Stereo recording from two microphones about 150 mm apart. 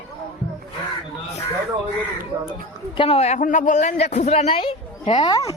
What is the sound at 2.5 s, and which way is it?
A man's voice, 35° left (ahead or behind).